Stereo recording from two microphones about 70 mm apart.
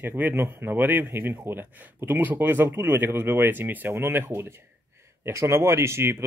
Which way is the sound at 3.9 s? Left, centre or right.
Right.